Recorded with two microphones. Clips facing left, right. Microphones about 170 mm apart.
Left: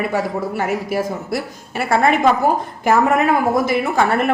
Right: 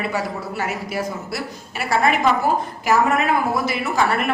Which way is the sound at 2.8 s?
50° left (ahead or behind).